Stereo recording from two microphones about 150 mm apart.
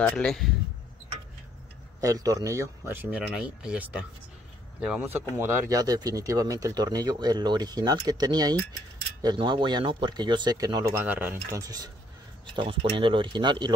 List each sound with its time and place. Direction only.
0.0 s a man's voice: 5° left (ahead or behind)
2.0 s speech: 25° right (ahead or behind)
11.6 s speech: 25° right (ahead or behind)